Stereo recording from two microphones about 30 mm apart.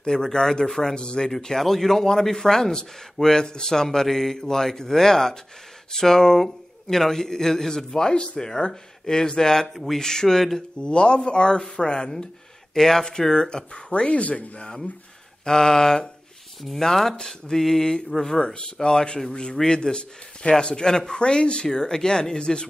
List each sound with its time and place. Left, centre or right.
0.0 s speech: left
0.9 s speech: left
1.6 s a man's voice: centre
10.8 s a man's voice: left
12.7 s speech: centre
13.3 s speech: left
14.0 s speech: left
15.4 s a man's voice: left
17.2 s speech: left
17.6 s a man's voice: centre
18.5 s speech: left
21.2 s a man's voice: left